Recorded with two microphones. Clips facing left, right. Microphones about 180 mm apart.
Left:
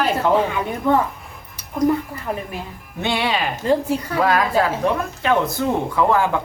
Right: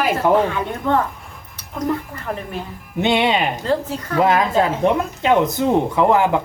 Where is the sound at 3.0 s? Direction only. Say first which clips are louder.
Right 4 dB; 20° right (ahead or behind).